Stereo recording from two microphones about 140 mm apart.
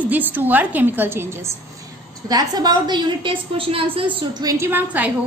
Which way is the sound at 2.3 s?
30° right (ahead or behind).